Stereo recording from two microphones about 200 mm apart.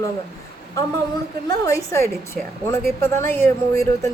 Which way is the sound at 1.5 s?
15° left (ahead or behind).